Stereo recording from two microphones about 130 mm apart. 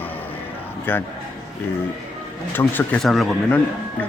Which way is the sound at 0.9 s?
15° left (ahead or behind).